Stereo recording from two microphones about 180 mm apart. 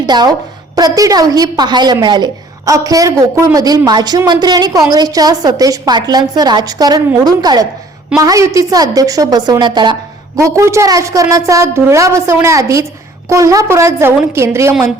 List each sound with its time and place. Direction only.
0.0 s a woman's voice: 20° right (ahead or behind)